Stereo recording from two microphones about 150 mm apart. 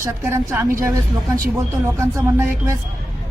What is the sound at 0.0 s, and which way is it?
Speech, 20° right (ahead or behind).